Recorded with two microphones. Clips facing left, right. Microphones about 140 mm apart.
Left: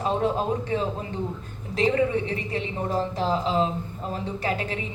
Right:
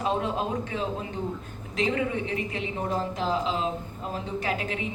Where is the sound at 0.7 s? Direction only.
35° left (ahead or behind).